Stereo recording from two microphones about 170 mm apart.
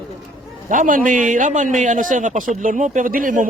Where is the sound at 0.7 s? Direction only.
50° right (ahead or behind).